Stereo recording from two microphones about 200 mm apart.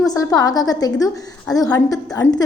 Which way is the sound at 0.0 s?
20° left (ahead or behind).